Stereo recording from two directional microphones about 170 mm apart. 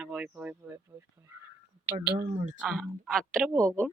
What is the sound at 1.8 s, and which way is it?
Speech, 10° right (ahead or behind).